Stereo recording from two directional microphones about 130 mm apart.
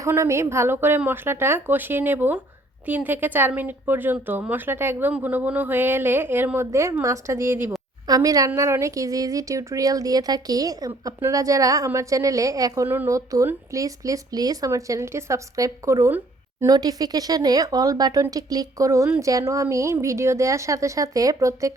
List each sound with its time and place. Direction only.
0.0 s a woman's voice: 20° right (ahead or behind)